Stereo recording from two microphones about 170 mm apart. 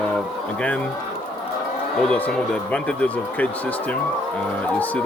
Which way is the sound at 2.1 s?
10° left (ahead or behind).